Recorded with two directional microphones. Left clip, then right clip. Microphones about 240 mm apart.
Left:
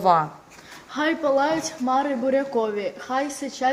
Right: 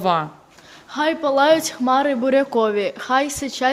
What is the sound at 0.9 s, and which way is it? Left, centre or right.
A woman's voice, right.